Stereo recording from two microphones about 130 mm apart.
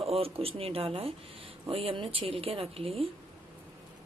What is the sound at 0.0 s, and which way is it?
Speech, 50° right (ahead or behind).